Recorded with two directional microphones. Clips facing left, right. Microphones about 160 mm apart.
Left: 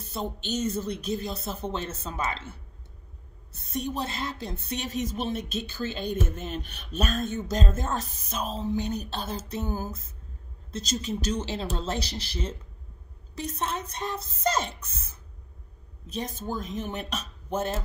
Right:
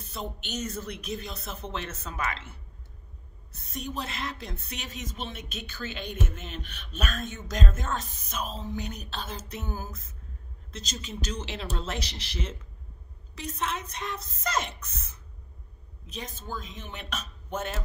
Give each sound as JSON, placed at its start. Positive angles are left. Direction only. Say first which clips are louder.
{"t": 0.1, "sound": "speech", "louder": "left 5 dB", "side_deg": 30}
{"t": 3.6, "sound": "a woman's voice", "louder": "left 4 dB", "side_deg": 30}
{"t": 16.1, "sound": "a woman's voice", "louder": "left 6 dB", "side_deg": 40}